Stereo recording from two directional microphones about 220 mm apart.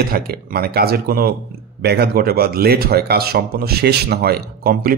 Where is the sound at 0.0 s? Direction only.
45° right (ahead or behind).